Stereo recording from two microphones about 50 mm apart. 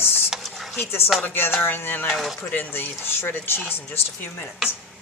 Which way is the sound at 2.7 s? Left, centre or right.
Left.